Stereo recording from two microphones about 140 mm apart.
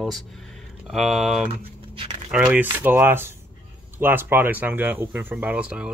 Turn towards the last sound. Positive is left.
turn(degrees=-10)  # may be behind; listen again after turning